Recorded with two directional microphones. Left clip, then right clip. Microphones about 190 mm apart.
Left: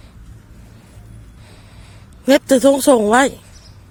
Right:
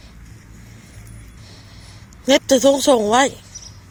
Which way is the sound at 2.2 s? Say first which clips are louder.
Left 2 dB; 35° left (ahead or behind).